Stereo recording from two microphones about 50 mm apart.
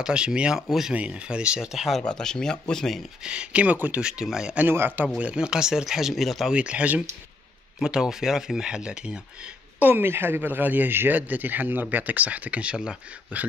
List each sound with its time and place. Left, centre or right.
0.0 s speech: centre
0.6 s speech: centre
0.9 s speech: right
2.0 s speech: centre
3.3 s speech: right
3.7 s speech: right
4.0 s speech: centre
4.6 s speech: right
5.0 s speech: right; by 6.5 s centre
6.5 s speech: right
7.8 s speech: centre
9.8 s speech: right